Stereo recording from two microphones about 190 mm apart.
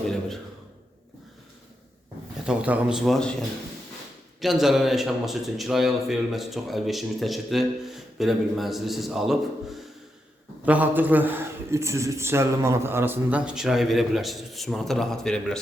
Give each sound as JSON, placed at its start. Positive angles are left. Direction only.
{"t": 2.5, "sound": "a man's voice", "side_deg": -5}
{"t": 4.4, "sound": "a man's voice", "side_deg": 0}